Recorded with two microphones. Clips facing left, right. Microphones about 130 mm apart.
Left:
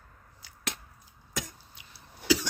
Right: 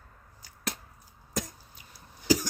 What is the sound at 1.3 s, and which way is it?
Cough, 40° right (ahead or behind).